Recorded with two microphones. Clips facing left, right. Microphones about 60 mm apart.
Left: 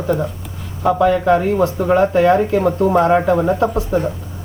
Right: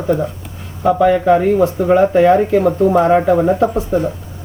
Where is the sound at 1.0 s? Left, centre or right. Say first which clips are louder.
Right 2 dB; centre.